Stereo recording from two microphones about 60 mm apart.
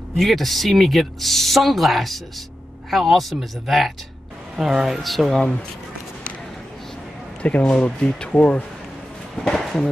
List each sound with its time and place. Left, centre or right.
0.2 s speech: centre
7.4 s speech: left
9.4 s speech: centre